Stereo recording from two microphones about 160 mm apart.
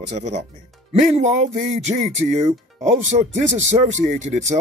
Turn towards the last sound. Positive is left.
turn(degrees=-50)  # may be behind; listen again after turning